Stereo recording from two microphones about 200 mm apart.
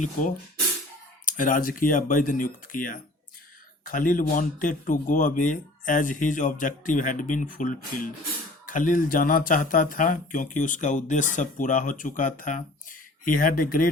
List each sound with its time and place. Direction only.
0.0 s speech: 40° left (ahead or behind)